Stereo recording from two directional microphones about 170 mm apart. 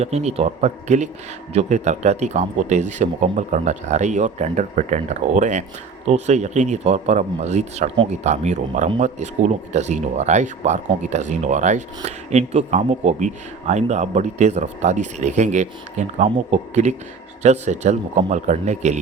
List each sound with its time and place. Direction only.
0.0 s speech: 40° right (ahead or behind)